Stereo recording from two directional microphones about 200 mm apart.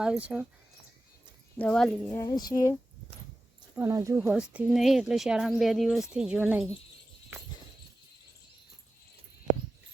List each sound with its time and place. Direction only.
0.0 s speech: 5° right (ahead or behind)
1.5 s speech: 5° left (ahead or behind)
2.2 s speech: 20° left (ahead or behind)
3.8 s speech: 15° right (ahead or behind)